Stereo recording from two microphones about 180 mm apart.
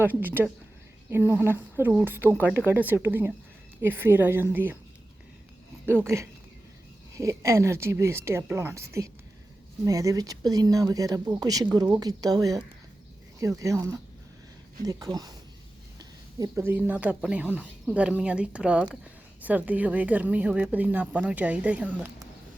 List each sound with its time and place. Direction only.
0.0 s a woman's voice: 10° right (ahead or behind)
7.2 s a woman's voice: 15° right (ahead or behind)